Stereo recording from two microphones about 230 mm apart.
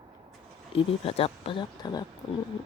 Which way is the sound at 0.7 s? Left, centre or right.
Left.